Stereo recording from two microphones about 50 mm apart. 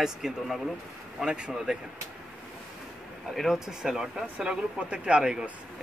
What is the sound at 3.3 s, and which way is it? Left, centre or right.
Speech, centre.